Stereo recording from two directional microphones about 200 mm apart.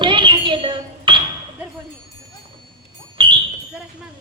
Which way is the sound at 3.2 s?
25° right (ahead or behind).